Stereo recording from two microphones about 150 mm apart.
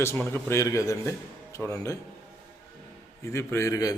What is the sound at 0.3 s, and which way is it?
A man's voice, 15° left (ahead or behind).